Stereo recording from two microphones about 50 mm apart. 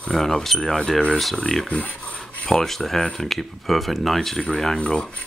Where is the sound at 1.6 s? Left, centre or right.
Left.